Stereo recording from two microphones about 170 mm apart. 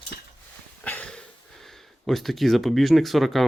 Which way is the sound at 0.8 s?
5° left (ahead or behind).